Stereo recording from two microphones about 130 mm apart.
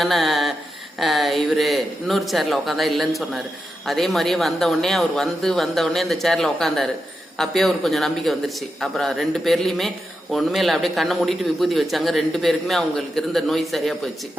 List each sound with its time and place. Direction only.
0.0 s a man's voice: centre (ahead or behind)